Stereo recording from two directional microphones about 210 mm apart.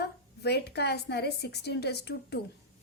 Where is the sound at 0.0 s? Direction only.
50° left (ahead or behind).